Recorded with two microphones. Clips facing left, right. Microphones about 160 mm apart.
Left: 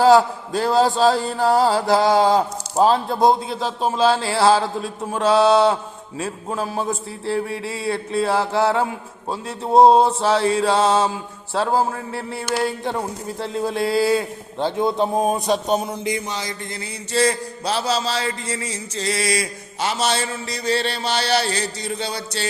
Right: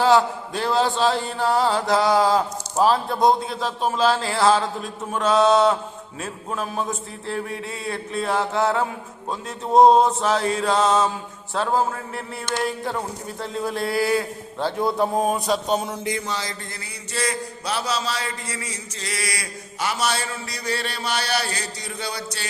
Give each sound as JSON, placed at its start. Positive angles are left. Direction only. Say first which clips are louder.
{"t": 0.0, "sound": "a sound", "louder": "left 4 dB", "side_deg": 35}
{"t": 12.5, "sound": "a man's voice", "louder": "left 2 dB", "side_deg": 30}
{"t": 15.6, "sound": "music", "louder": "left 2 dB", "side_deg": 15}
{"t": 17.1, "sound": "a man's voice", "louder": "left 7 dB", "side_deg": 30}